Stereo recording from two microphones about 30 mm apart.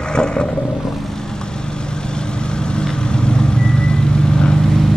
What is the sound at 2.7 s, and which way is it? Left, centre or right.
Vehicle, left.